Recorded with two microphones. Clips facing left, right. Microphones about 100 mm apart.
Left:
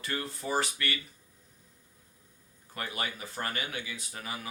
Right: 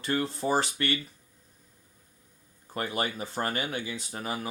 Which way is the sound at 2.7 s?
30° right (ahead or behind).